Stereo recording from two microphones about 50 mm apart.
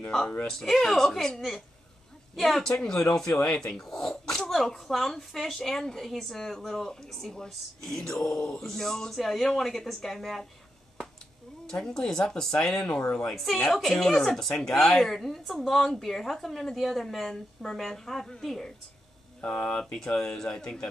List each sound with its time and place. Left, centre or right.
0.5 s a woman's voice: centre
11.8 s speech: centre
12.7 s speech: left
13.3 s a woman's voice: centre
19.4 s speech: left
19.8 s speech: centre